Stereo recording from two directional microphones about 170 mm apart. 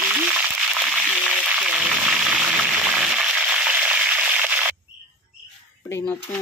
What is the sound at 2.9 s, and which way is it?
Frying, 5° right (ahead or behind).